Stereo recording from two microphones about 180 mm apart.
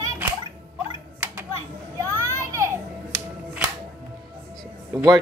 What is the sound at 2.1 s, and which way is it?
Children playing, 15° right (ahead or behind).